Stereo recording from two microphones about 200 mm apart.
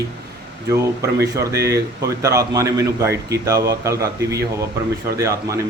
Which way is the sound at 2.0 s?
15° right (ahead or behind).